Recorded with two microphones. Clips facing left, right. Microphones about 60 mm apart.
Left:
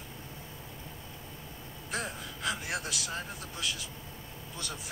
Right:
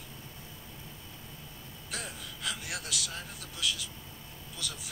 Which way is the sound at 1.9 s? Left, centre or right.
Left.